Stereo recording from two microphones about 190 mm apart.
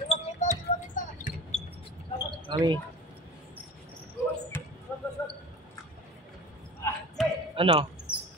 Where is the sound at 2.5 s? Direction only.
25° right (ahead or behind).